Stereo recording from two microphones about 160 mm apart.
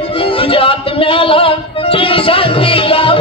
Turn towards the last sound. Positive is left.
turn(degrees=35)  # may be behind; listen again after turning